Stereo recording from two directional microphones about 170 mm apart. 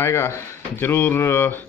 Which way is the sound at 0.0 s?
15° left (ahead or behind).